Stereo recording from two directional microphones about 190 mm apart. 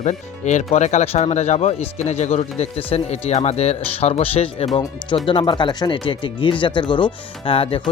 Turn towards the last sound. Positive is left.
turn(degrees=30)  # may be behind; listen again after turning